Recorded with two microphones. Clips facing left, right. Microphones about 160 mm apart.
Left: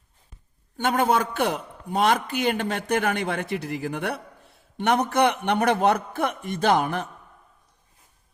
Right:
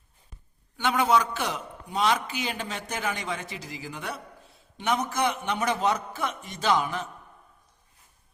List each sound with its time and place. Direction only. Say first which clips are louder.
0.8 s a man's voice: left 2 dB; 50° left (ahead or behind)